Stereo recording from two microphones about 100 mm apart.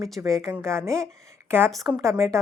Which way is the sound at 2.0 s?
30° right (ahead or behind).